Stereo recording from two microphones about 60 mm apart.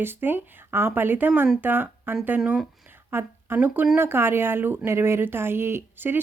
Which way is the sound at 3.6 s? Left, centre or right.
Right.